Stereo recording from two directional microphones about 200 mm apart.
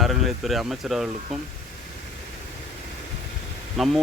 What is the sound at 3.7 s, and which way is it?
Speech, centre (ahead or behind).